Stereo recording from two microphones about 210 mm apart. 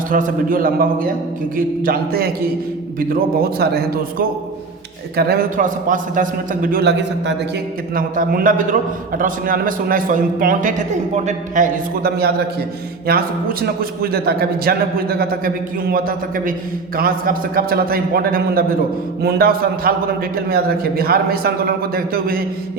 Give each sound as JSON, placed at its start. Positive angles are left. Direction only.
{"t": 0.1, "sound": "a man's voice", "side_deg": -40}
{"t": 7.9, "sound": "a man's voice", "side_deg": -40}